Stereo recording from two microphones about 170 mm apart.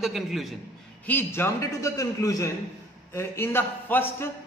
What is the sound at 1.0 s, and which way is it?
A man's voice, 10° left (ahead or behind).